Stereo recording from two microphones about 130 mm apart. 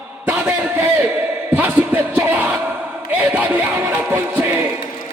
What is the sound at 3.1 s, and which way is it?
Music, 10° right (ahead or behind).